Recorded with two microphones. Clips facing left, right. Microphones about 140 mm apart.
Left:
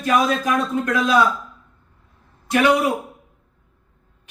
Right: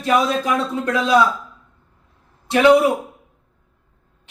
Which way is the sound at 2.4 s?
30° right (ahead or behind).